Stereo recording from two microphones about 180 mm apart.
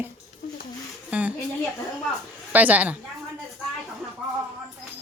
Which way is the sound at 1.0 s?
5° right (ahead or behind).